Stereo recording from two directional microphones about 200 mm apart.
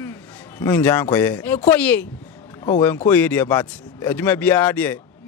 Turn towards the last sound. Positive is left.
turn(degrees=10)  # may be behind; listen again after turning